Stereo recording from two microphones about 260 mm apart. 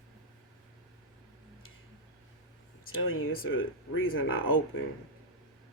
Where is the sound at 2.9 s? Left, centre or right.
Left.